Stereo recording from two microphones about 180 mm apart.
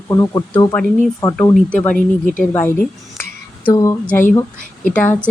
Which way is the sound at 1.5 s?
5° left (ahead or behind).